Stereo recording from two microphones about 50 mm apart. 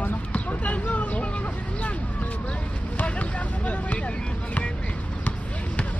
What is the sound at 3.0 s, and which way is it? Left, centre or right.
Vehicle, left.